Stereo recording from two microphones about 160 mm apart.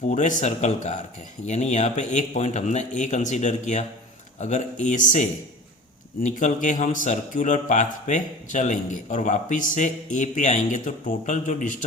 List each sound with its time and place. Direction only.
0.1 s a man's voice: 50° left (ahead or behind)